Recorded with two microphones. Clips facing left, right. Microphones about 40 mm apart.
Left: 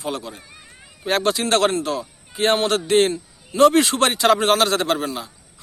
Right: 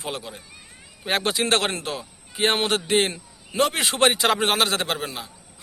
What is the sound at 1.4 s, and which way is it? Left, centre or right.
Speech, right.